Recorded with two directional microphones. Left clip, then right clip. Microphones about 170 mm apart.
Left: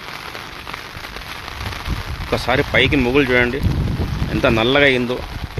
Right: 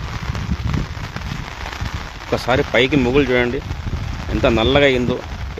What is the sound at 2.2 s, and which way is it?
Speech, 15° right (ahead or behind).